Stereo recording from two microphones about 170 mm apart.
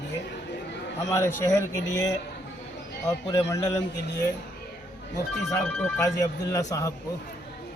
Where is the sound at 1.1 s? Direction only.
20° left (ahead or behind).